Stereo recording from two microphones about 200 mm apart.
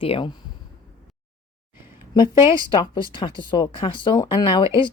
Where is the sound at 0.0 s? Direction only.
25° left (ahead or behind).